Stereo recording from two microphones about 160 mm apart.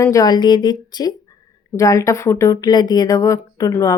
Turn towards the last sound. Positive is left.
turn(degrees=20)  # may be behind; listen again after turning